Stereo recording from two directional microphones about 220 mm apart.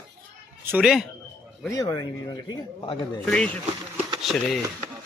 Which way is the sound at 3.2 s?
5° left (ahead or behind).